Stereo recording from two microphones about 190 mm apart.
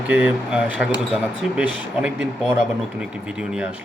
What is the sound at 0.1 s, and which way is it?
A man's voice, 10° right (ahead or behind).